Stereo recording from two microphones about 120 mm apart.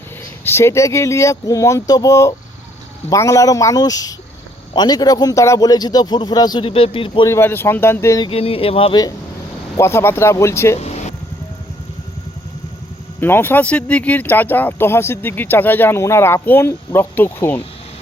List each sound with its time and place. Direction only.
0.4 s a man's voice: 20° left (ahead or behind)
6.7 s speech: 50° left (ahead or behind)
7.3 s speech: 20° left (ahead or behind)
8.3 s speech: 50° left (ahead or behind)
9.7 s speech: 20° left (ahead or behind)
10.8 s air conditioning: 65° left (ahead or behind)
13.1 s speech: 20° left (ahead or behind)